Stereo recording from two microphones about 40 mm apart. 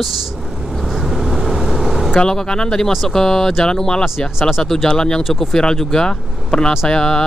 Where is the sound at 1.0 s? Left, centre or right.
Centre.